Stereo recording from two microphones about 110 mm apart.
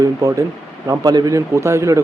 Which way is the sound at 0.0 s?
30° right (ahead or behind).